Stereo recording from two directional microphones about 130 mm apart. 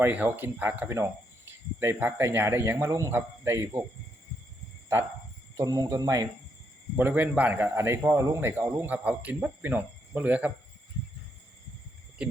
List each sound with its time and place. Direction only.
0.0 s a man's voice: 15° right (ahead or behind)
5.5 s speech: 25° right (ahead or behind)
6.9 s a man's voice: 15° right (ahead or behind)